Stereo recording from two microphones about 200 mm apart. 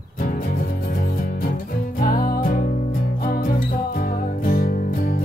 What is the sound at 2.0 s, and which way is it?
Music, 45° left (ahead or behind).